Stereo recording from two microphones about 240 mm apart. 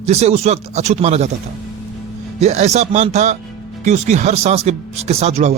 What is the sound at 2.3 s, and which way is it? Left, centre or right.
A man's voice, right.